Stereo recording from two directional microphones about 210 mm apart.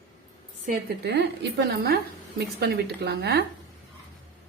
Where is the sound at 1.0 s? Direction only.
55° right (ahead or behind).